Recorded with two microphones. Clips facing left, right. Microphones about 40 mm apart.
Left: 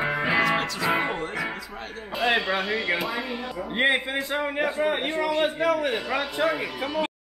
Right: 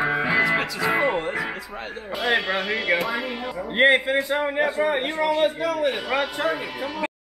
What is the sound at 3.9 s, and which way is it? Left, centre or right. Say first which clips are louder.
A man's voice: right 5 dB; centre.